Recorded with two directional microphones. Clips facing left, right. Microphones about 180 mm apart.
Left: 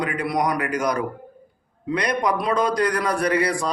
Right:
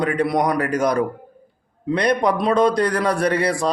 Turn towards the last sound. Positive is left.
turn(degrees=-30)  # may be behind; listen again after turning